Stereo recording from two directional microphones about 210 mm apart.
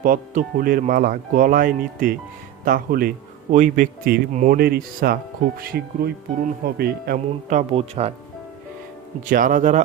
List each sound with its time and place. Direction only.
0.0 s speech: 40° right (ahead or behind)
4.5 s speech: 45° right (ahead or behind)
7.7 s speech: 30° right (ahead or behind)
9.2 s speech: 40° right (ahead or behind)